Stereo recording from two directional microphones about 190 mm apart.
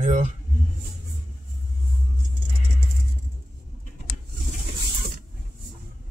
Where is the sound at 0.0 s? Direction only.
40° right (ahead or behind).